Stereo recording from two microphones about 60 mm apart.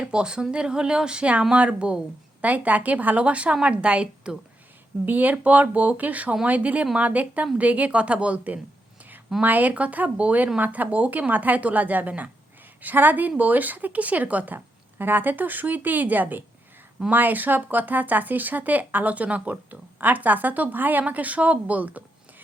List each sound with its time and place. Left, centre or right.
0.0 s speech: centre
5.0 s a woman's voice: right